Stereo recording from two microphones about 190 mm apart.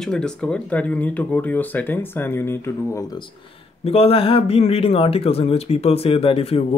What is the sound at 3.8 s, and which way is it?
Speech, 30° left (ahead or behind).